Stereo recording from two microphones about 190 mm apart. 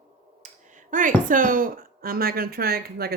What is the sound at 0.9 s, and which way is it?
A woman's voice, 45° right (ahead or behind).